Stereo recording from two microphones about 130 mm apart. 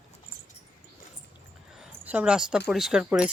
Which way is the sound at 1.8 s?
10° right (ahead or behind).